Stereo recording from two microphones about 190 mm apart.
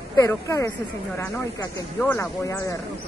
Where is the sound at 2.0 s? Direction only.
10° left (ahead or behind).